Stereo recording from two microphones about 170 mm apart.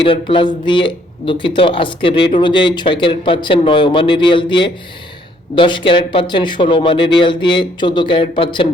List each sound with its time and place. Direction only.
0.0 s a man's voice: 30° left (ahead or behind)